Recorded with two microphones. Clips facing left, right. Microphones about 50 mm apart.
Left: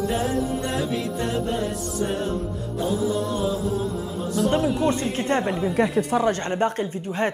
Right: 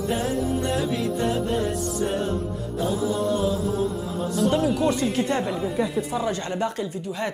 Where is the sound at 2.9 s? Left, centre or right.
Centre.